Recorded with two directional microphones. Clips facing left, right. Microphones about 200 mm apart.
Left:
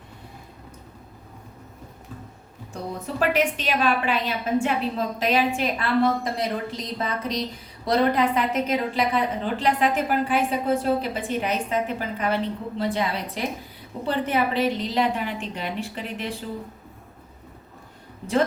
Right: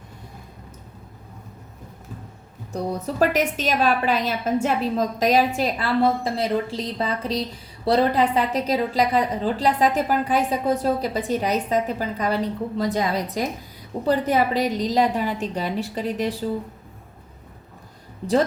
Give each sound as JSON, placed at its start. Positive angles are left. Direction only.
{"t": 2.7, "sound": "a woman's voice", "side_deg": -40}